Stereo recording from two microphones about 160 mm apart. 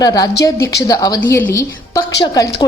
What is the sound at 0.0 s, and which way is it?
A woman's voice, 25° left (ahead or behind).